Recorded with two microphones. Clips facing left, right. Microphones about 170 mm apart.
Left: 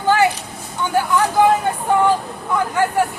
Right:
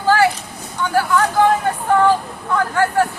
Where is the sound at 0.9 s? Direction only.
15° left (ahead or behind).